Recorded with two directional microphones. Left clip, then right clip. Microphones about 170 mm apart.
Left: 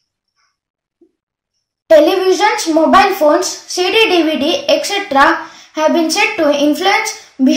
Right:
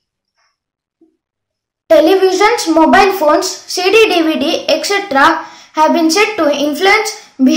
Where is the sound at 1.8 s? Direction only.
20° right (ahead or behind).